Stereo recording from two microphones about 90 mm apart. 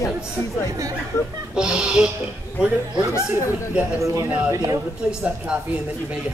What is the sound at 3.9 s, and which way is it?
Speech, 35° right (ahead or behind).